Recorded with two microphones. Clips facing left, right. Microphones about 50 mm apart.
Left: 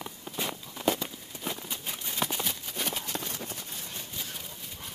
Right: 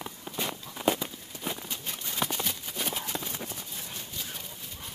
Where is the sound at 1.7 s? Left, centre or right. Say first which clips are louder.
Even; centre.